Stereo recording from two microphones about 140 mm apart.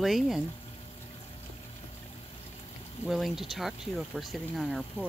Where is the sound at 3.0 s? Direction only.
Centre (ahead or behind).